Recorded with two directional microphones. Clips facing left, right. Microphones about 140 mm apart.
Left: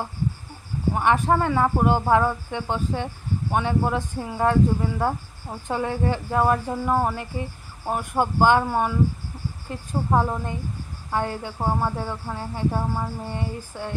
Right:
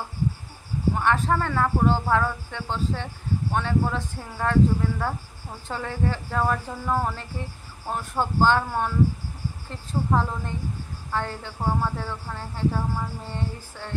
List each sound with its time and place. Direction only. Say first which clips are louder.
0.9 s speech: left 4 dB; 15° left (ahead or behind)